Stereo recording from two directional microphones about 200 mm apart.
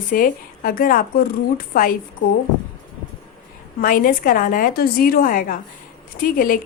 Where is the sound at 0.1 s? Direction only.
45° left (ahead or behind).